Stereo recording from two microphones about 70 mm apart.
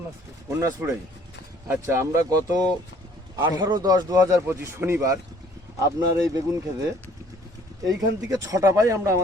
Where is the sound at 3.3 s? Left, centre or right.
Right.